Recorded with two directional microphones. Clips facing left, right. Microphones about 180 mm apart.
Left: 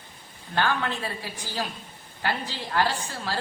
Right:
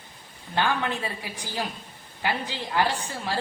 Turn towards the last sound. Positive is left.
turn(degrees=-15)  # may be behind; listen again after turning